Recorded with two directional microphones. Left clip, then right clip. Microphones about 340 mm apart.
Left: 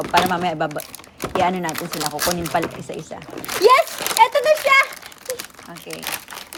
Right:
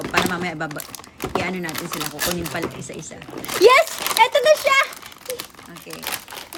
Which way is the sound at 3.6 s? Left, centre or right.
Right.